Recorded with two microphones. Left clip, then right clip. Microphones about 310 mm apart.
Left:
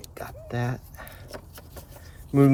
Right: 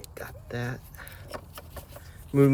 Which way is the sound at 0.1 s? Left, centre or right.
Centre.